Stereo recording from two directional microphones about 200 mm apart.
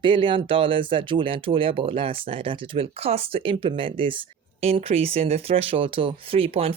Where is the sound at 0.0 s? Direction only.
25° right (ahead or behind).